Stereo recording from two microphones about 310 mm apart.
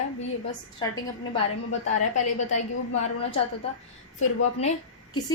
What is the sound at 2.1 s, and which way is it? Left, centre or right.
A woman's voice, left.